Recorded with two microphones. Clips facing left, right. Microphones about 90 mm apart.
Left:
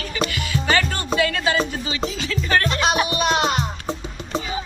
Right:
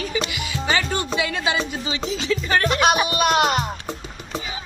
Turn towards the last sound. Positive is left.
turn(degrees=-50)  # may be behind; listen again after turning